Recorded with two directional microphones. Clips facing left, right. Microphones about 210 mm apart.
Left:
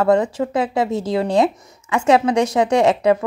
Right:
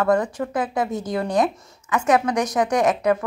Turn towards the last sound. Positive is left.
turn(degrees=25)  # may be behind; listen again after turning